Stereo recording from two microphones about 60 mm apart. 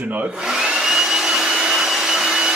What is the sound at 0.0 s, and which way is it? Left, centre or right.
Speech, right.